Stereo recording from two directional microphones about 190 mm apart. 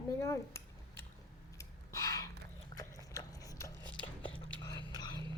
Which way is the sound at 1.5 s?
15° left (ahead or behind).